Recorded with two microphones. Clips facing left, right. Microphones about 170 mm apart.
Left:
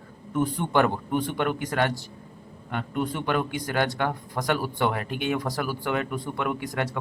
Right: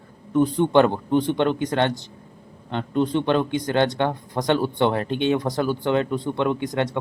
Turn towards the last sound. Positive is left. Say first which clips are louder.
# right 5 dB
turn(degrees=-25)  # may be behind; listen again after turning